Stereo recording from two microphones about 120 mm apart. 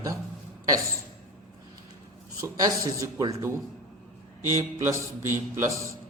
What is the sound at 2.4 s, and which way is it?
A man's voice, 30° right (ahead or behind).